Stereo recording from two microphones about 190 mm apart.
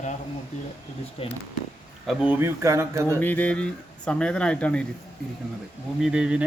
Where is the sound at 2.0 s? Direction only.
10° right (ahead or behind).